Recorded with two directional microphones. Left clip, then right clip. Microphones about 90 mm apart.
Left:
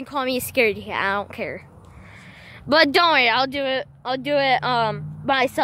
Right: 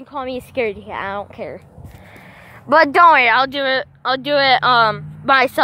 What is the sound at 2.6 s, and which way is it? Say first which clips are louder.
Speech: right 6 dB; 50° left (ahead or behind).